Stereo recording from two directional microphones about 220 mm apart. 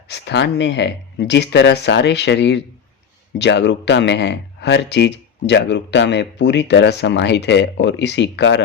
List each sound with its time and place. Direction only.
0.1 s speech: 50° left (ahead or behind)